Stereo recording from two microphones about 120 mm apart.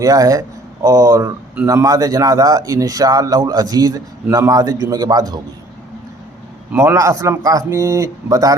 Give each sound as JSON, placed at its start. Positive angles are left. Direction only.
{"t": 0.0, "sound": "a man's voice", "side_deg": -30}
{"t": 6.7, "sound": "speech", "side_deg": -20}